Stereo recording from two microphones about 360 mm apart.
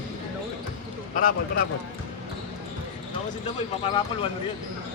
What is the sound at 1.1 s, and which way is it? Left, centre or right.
Speech, left.